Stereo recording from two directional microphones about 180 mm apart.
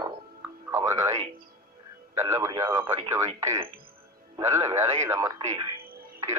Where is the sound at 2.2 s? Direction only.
15° right (ahead or behind).